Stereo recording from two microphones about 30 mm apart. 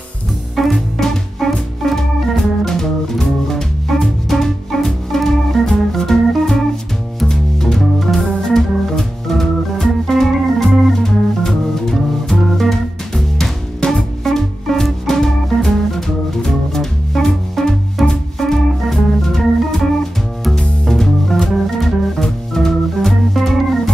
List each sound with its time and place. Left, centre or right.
0.6 s music: centre
1.4 s music: centre
1.8 s organ: centre
7.2 s music: centre
7.8 s organ: centre
11.0 s music: centre
14.2 s music: centre
19.2 s organ: centre
20.8 s music: centre